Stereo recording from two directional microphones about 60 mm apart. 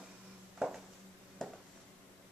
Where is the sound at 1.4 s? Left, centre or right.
Centre.